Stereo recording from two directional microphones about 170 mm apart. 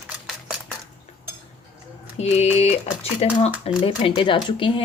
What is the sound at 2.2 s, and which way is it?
Speech, 40° left (ahead or behind).